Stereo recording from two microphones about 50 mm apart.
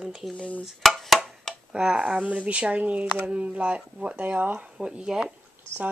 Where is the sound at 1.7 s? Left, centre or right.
Centre.